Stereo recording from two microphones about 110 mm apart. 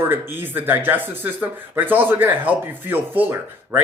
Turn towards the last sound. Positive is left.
turn(degrees=-15)  # may be behind; listen again after turning